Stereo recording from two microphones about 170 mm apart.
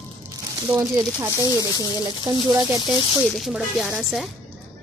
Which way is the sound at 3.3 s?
Centre (ahead or behind).